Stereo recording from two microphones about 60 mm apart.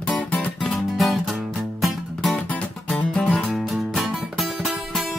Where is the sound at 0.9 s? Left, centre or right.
Centre.